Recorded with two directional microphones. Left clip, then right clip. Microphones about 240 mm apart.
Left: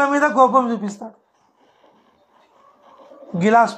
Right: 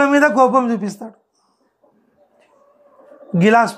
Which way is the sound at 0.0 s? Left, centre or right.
Right.